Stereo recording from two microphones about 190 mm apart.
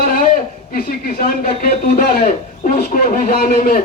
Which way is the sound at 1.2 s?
50° left (ahead or behind).